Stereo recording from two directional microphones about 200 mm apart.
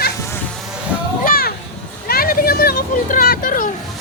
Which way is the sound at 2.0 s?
50° left (ahead or behind).